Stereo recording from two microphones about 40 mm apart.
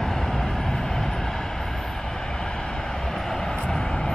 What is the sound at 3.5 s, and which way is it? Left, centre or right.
Vehicle, left.